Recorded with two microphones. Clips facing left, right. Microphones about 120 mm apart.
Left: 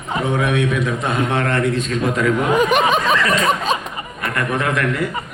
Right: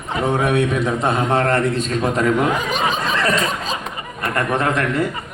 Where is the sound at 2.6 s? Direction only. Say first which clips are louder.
Left 5 dB; 60° left (ahead or behind).